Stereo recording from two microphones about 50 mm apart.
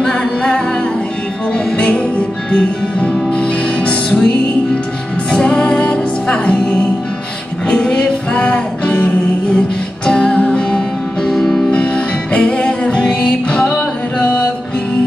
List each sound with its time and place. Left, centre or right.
0.0 s music: centre
1.8 s music: left
5.3 s music: left
7.6 s music: centre
10.0 s music: left
11.2 s music: centre
11.7 s music: left